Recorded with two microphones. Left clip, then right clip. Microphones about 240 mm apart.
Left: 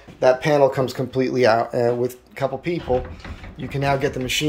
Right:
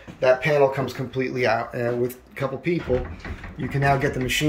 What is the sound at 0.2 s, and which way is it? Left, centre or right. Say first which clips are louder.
Speech: left 2 dB; left.